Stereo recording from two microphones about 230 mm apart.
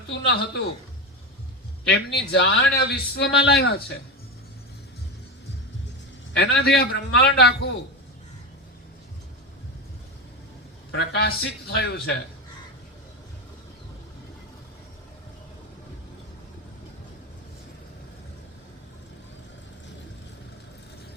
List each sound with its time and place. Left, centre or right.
0.1 s a man's voice: left
1.9 s a man's voice: left
6.3 s a man's voice: left
10.9 s a man's voice: left